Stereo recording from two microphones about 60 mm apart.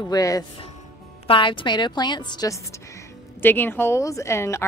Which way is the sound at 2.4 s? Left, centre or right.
Left.